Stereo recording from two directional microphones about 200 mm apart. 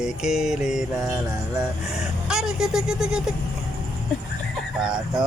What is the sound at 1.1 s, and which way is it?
Music, 20° right (ahead or behind).